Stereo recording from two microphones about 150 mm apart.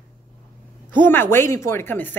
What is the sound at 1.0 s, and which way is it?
Speech, 15° left (ahead or behind).